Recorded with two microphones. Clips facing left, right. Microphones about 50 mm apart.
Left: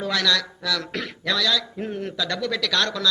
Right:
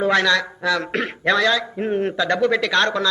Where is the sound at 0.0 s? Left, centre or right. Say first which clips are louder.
Right 6 dB; right.